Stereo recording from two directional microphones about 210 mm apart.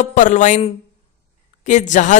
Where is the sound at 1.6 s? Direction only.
35° left (ahead or behind).